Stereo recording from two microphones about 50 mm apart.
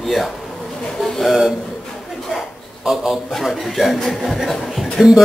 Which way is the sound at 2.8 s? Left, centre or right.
Centre.